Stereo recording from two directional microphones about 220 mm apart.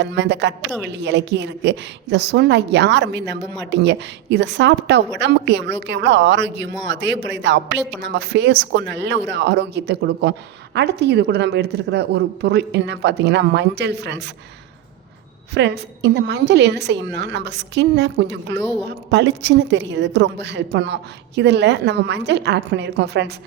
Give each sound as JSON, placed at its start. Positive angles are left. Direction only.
{"t": 0.0, "sound": "a woman's voice", "side_deg": -55}
{"t": 15.5, "sound": "a woman's voice", "side_deg": -50}